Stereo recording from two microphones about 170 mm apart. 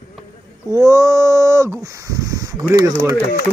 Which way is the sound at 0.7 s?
20° right (ahead or behind).